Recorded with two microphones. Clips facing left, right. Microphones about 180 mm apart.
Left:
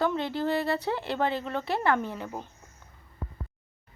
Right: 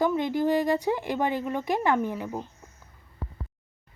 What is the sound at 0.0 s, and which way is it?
Speech, 15° right (ahead or behind).